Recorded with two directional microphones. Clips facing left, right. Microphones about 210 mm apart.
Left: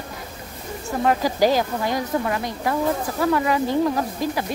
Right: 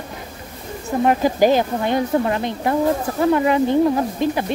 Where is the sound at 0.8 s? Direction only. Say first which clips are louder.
Right 4 dB; 20° right (ahead or behind).